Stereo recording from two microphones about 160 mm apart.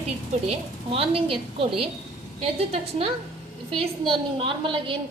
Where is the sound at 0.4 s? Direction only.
35° right (ahead or behind).